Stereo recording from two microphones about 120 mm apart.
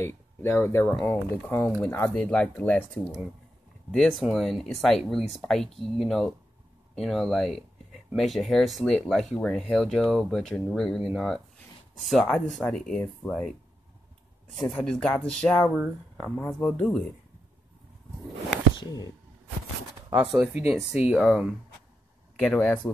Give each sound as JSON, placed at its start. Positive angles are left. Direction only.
{"t": 0.0, "sound": "speech", "side_deg": 15}
{"t": 14.6, "sound": "speech", "side_deg": 5}
{"t": 20.1, "sound": "speech", "side_deg": -10}
{"t": 22.4, "sound": "speech", "side_deg": 10}